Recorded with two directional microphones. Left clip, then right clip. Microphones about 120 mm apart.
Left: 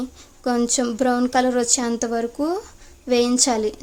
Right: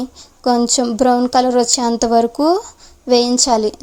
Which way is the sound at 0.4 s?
30° right (ahead or behind).